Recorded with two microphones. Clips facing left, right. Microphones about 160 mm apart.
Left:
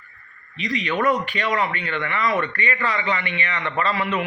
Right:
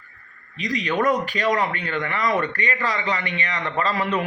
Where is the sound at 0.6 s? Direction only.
40° right (ahead or behind).